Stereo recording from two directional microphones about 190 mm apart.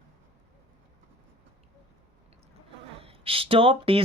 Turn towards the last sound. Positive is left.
turn(degrees=-30)  # may be behind; listen again after turning